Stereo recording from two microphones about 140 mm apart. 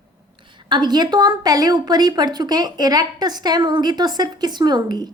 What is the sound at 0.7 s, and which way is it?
A woman's voice, 30° right (ahead or behind).